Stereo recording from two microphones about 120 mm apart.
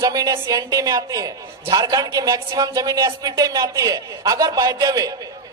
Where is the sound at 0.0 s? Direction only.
30° right (ahead or behind).